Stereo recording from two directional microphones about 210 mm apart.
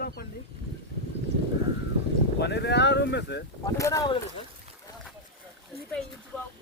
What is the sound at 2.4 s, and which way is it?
Speech, 55° left (ahead or behind).